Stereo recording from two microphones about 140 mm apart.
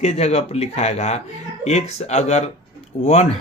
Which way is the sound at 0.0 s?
50° left (ahead or behind).